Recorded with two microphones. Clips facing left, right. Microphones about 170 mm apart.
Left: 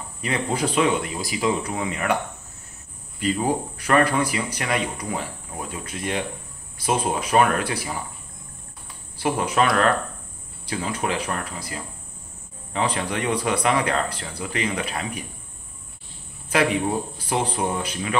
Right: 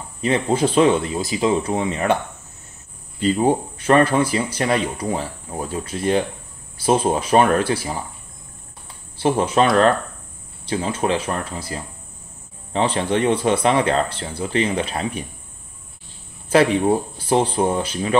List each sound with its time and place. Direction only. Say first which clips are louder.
0.2 s speech: right 6 dB; 25° right (ahead or behind)
3.2 s speech: right 5 dB; 30° right (ahead or behind)
9.2 s speech: right 4 dB; 25° right (ahead or behind)
16.4 s speech: right 6 dB; 30° right (ahead or behind)